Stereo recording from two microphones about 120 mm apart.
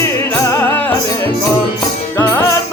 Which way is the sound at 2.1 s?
20° left (ahead or behind).